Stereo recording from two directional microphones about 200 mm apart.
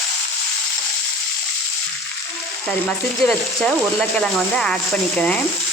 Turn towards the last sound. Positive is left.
turn(degrees=5)  # may be behind; listen again after turning